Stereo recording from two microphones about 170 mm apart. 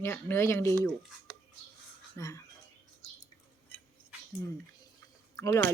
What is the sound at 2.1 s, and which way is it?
Speech, 20° left (ahead or behind).